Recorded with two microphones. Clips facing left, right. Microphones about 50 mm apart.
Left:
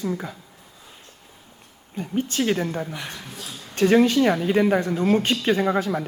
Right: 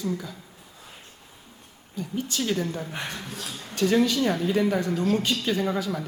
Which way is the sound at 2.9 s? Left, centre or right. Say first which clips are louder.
Even; right.